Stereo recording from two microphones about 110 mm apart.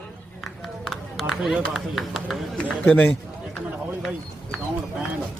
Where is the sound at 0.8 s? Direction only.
Centre (ahead or behind).